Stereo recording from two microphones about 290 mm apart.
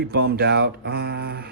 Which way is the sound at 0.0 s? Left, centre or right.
Right.